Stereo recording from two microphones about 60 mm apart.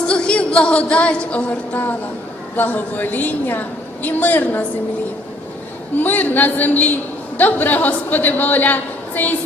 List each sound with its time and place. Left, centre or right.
0.1 s a woman's voice: centre
6.0 s a woman's voice: left